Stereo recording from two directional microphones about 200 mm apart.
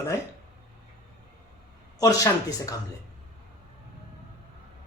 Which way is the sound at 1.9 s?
15° left (ahead or behind).